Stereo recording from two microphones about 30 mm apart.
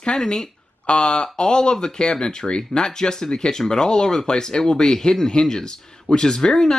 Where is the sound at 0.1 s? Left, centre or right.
Left.